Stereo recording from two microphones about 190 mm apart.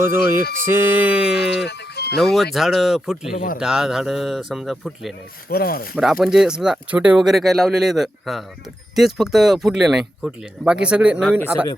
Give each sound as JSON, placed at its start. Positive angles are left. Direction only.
{"t": 0.0, "sound": "music", "side_deg": -15}
{"t": 1.6, "sound": "music", "side_deg": 60}
{"t": 2.1, "sound": "speech", "side_deg": 0}
{"t": 5.5, "sound": "speech", "side_deg": 50}
{"t": 6.0, "sound": "speech", "side_deg": 0}